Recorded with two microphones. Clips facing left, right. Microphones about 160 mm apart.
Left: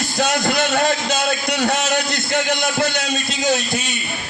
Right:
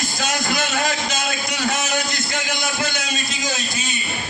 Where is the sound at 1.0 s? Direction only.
65° left (ahead or behind).